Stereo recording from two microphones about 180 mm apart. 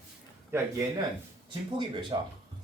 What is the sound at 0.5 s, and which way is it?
Speech, 15° right (ahead or behind).